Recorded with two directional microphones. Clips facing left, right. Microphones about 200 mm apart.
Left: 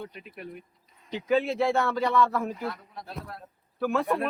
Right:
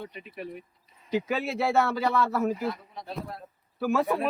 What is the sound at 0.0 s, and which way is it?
A man's voice, centre (ahead or behind).